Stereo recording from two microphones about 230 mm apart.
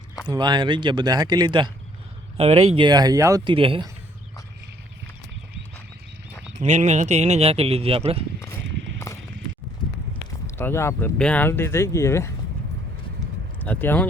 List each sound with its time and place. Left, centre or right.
0.3 s speech: centre
6.6 s speech: right
8.4 s clip-clop: centre
10.6 s speech: centre
13.7 s speech: centre